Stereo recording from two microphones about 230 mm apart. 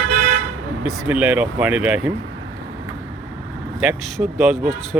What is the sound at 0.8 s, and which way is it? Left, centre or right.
Speech, centre.